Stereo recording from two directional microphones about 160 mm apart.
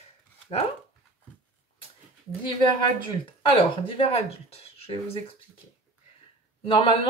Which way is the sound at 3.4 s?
35° left (ahead or behind).